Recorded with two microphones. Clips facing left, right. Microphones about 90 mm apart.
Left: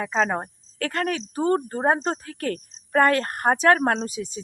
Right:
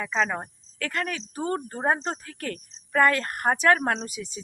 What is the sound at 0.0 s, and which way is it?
Speech, 35° left (ahead or behind).